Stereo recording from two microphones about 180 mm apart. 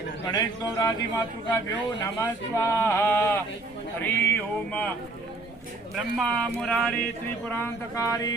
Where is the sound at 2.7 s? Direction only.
15° left (ahead or behind).